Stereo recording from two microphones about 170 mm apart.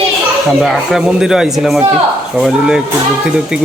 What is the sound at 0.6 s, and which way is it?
Speech, centre (ahead or behind).